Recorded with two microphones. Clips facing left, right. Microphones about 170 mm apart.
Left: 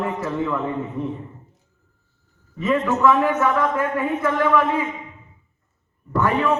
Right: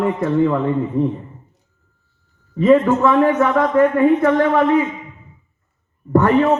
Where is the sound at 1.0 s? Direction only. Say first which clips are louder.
Right 11 dB; 30° right (ahead or behind).